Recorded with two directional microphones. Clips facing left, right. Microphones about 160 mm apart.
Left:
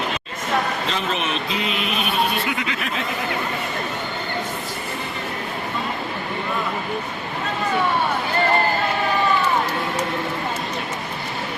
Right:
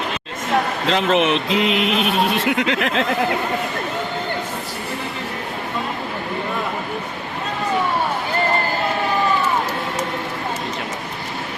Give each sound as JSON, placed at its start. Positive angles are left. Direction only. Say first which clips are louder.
{"t": 0.9, "sound": "speech", "louder": "right 7 dB", "side_deg": -85}